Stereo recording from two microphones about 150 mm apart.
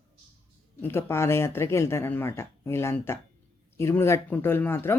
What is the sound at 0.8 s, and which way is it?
Speech, 15° left (ahead or behind).